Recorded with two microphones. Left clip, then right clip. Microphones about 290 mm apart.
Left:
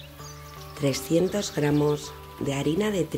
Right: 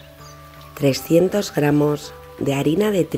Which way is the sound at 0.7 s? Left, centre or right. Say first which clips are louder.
Right 8 dB; centre.